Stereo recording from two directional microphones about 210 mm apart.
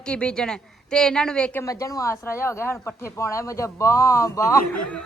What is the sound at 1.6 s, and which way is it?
A woman's voice, 15° left (ahead or behind).